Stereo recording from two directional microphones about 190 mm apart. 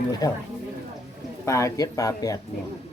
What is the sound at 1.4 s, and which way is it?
Speech, 15° left (ahead or behind).